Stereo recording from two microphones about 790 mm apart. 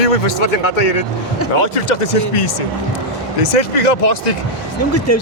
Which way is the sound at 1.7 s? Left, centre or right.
Left.